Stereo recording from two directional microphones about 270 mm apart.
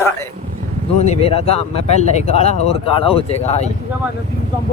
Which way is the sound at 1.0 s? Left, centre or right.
Left.